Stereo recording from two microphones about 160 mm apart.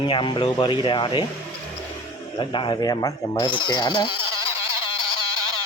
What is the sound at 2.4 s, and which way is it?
Speech, 30° left (ahead or behind).